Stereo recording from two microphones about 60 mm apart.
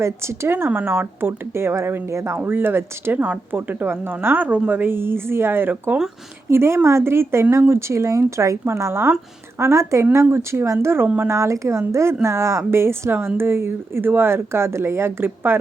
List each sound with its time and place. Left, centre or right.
0.0 s speech: right
0.5 s speech: right
2.4 s speech: right
8.6 s speech: right